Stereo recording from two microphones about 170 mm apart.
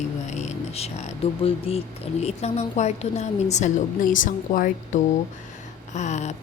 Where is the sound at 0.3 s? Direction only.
40° left (ahead or behind).